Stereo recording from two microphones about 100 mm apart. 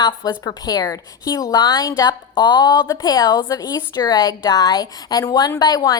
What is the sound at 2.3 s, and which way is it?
A woman's voice, 45° left (ahead or behind).